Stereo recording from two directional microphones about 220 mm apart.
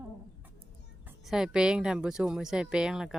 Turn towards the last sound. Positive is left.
turn(degrees=-5)  # may be behind; listen again after turning